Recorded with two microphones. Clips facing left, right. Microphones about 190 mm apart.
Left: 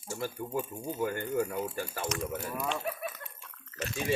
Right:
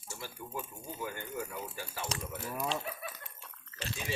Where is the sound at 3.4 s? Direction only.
30° right (ahead or behind).